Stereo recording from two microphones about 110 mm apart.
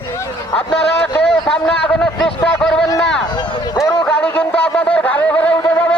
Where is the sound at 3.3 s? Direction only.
40° left (ahead or behind).